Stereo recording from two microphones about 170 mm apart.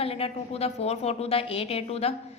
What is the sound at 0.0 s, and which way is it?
A woman's voice, 35° left (ahead or behind).